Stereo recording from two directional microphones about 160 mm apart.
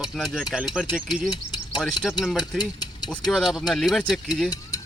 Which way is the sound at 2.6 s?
25° left (ahead or behind).